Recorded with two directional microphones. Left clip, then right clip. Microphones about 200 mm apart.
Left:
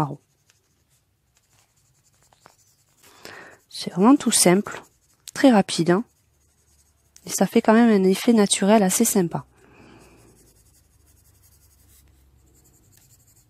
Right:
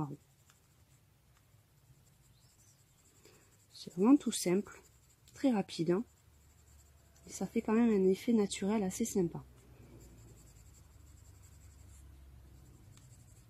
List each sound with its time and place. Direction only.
3.7 s speech: 50° left (ahead or behind)
7.3 s speech: 50° left (ahead or behind)